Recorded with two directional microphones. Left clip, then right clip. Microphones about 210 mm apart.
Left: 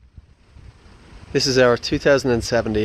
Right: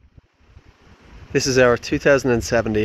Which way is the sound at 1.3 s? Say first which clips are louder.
Even; 5° right (ahead or behind).